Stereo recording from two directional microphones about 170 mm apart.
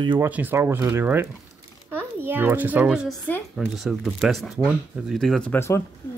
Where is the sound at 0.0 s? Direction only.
25° right (ahead or behind).